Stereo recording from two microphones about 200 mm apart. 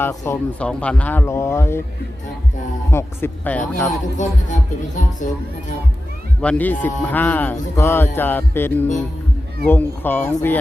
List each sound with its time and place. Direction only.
0.0 s speech: 10° left (ahead or behind)
2.9 s speech: 10° left (ahead or behind)
4.2 s speech: 40° left (ahead or behind)
6.4 s speech: 5° left (ahead or behind)